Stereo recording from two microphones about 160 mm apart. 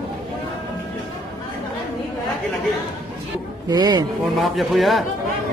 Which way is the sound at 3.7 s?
25° right (ahead or behind).